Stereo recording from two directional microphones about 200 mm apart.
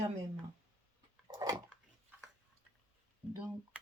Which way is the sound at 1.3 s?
20° right (ahead or behind).